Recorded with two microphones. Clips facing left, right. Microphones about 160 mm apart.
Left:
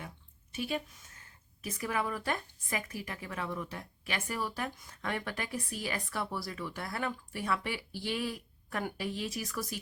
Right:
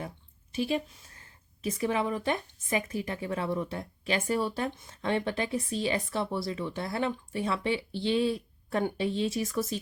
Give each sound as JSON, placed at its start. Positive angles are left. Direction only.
{"t": 0.5, "sound": "a woman's voice", "side_deg": -30}